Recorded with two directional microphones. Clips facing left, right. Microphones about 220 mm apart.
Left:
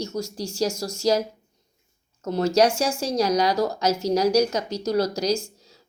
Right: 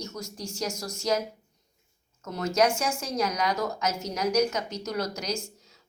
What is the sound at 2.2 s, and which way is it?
Speech, 30° left (ahead or behind).